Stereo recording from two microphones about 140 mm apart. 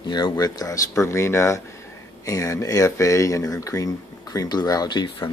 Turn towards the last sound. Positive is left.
turn(degrees=35)  # may be behind; listen again after turning